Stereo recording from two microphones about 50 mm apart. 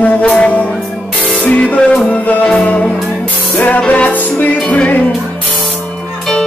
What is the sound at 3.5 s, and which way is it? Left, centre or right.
Music, left.